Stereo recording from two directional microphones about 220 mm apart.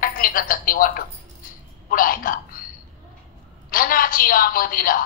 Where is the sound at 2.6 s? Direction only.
40° left (ahead or behind).